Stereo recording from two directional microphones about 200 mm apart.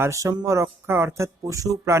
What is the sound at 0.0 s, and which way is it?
Speech, 15° right (ahead or behind).